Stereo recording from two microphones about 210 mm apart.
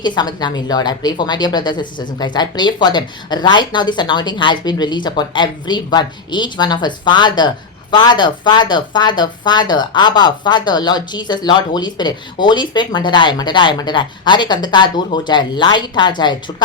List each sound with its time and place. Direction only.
0.0 s a woman's voice: 20° left (ahead or behind)